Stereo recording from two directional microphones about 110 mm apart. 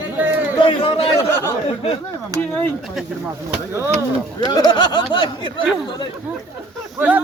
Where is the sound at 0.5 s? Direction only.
50° left (ahead or behind).